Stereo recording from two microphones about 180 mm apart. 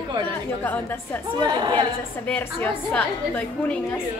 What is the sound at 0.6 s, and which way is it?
Speech, 10° left (ahead or behind).